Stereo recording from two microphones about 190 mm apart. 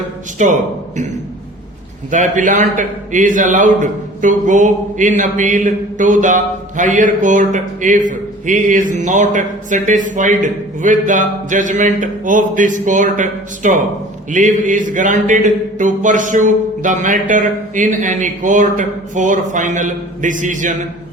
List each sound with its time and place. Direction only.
0.3 s a man's voice: 40° right (ahead or behind)
2.0 s a man's voice: 40° right (ahead or behind)